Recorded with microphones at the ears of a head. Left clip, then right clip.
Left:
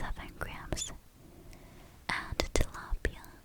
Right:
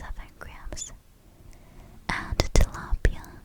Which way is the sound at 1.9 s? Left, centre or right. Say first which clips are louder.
Right 5 dB; right.